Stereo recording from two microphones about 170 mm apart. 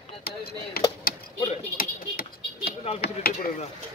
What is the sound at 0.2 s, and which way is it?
Chop, 65° left (ahead or behind).